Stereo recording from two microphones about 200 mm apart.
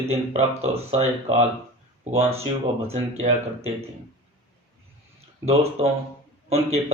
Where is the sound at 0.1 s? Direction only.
30° right (ahead or behind).